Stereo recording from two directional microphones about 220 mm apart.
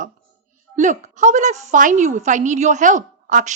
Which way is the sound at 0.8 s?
35° right (ahead or behind).